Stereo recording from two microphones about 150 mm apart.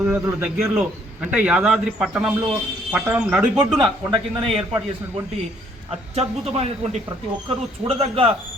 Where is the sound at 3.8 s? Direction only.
30° right (ahead or behind).